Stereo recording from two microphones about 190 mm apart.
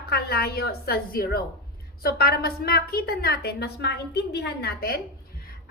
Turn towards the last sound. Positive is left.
turn(degrees=55)  # may be behind; listen again after turning